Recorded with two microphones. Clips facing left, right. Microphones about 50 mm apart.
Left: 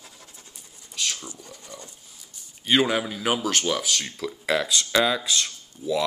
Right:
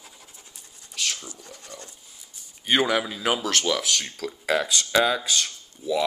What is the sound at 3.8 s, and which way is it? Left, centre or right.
Speech, centre.